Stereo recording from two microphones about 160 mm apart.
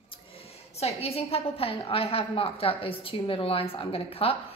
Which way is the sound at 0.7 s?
40° left (ahead or behind).